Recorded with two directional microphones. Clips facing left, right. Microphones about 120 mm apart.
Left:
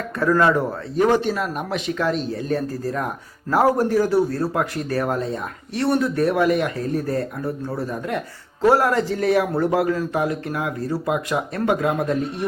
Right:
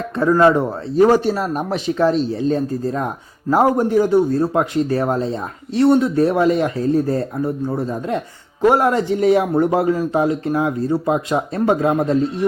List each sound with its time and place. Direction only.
0.2 s speech: 25° right (ahead or behind)